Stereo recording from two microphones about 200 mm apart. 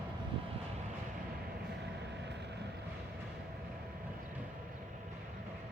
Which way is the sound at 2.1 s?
60° right (ahead or behind).